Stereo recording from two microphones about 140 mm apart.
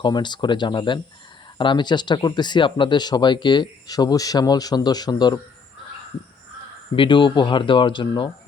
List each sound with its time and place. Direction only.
0.0 s speech: 30° left (ahead or behind)
6.9 s speech: 35° left (ahead or behind)